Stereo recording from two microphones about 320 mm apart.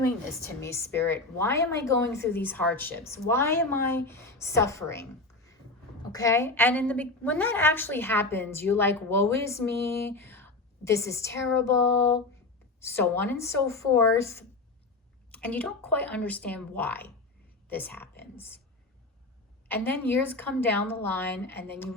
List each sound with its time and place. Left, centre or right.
0.4 s a woman's voice: centre
6.1 s a woman's voice: centre
19.6 s a woman's voice: centre